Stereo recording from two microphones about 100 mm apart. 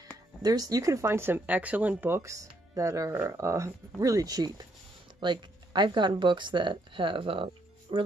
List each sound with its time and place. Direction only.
0.4 s speech: 40° right (ahead or behind); by 8.0 s 60° right (ahead or behind)